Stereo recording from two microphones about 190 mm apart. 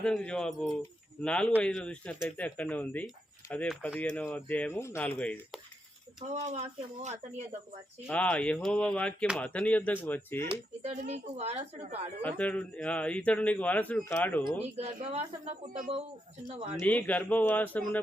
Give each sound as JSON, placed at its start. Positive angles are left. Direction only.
{"t": 0.0, "sound": "a man's voice", "side_deg": 5}
{"t": 6.3, "sound": "speech", "side_deg": -35}
{"t": 8.0, "sound": "a man's voice", "side_deg": 5}
{"t": 10.5, "sound": "speech", "side_deg": -35}
{"t": 12.2, "sound": "a man's voice", "side_deg": 5}
{"t": 14.8, "sound": "speech", "side_deg": -35}
{"t": 16.5, "sound": "speech", "side_deg": -30}
{"t": 16.8, "sound": "a man's voice", "side_deg": 10}